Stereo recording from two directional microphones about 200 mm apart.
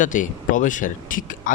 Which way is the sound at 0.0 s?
40° left (ahead or behind).